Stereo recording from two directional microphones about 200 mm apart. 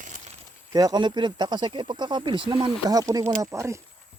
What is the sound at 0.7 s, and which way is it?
Speech, 20° right (ahead or behind).